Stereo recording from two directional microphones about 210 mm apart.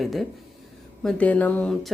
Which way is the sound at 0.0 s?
Centre (ahead or behind).